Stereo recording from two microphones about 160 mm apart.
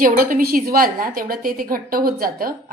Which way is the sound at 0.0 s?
60° right (ahead or behind).